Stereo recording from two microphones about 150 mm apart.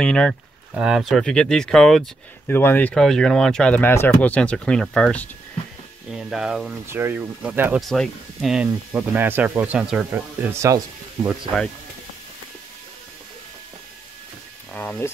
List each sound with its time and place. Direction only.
0.0 s speech: 5° left (ahead or behind)
2.4 s speech: 15° left (ahead or behind)
6.1 s speech: 5° right (ahead or behind)
6.9 s speech: 15° right (ahead or behind)
7.9 s speech: centre (ahead or behind)
10.1 s speech: 15° right (ahead or behind)
14.7 s speech: 10° left (ahead or behind)